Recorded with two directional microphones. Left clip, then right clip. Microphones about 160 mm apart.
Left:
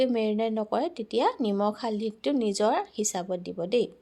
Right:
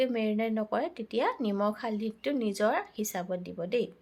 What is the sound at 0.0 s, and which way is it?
A woman's voice, 40° left (ahead or behind).